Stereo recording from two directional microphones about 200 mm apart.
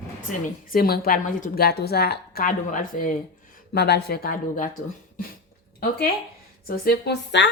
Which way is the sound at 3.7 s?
55° left (ahead or behind).